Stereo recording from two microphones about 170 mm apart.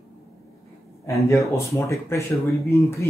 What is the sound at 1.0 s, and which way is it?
Speech, 15° left (ahead or behind).